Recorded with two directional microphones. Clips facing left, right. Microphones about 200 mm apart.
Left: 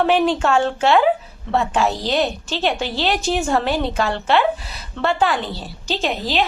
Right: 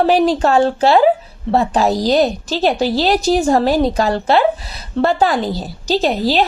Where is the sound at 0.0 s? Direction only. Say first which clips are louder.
Right 4 dB; 35° right (ahead or behind).